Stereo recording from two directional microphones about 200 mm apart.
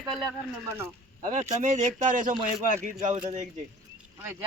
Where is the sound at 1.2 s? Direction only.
35° right (ahead or behind).